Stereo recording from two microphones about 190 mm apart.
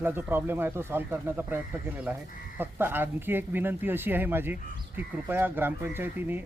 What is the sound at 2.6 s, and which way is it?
Speech, 10° right (ahead or behind).